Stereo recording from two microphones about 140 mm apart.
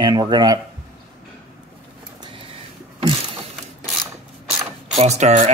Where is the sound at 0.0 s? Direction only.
30° right (ahead or behind).